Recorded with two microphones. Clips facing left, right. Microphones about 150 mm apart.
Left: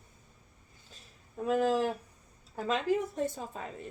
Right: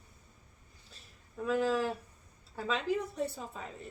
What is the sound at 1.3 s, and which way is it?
Speech, 55° left (ahead or behind).